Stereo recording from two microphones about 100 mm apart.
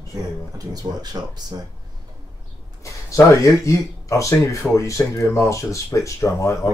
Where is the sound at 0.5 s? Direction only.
40° right (ahead or behind).